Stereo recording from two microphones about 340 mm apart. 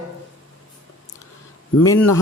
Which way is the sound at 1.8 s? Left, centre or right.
Centre.